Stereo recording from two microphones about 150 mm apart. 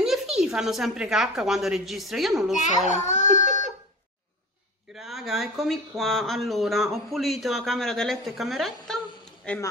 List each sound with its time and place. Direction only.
0.0 s a woman's voice: 5° right (ahead or behind)
2.9 s baby cry: 50° left (ahead or behind)
4.9 s speech: centre (ahead or behind)